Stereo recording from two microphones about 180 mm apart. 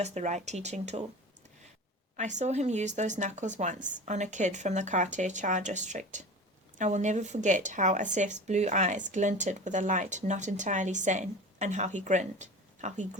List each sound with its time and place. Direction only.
0.0 s speech: 40° right (ahead or behind)
2.1 s speech: 40° right (ahead or behind)